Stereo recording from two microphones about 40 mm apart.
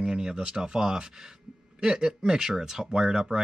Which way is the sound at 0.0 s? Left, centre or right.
Centre.